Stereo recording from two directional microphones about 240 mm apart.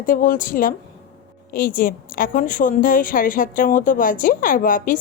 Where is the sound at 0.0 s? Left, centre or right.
Left.